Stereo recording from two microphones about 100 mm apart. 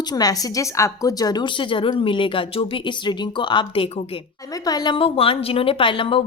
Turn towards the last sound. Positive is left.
turn(degrees=60)  # may be behind; listen again after turning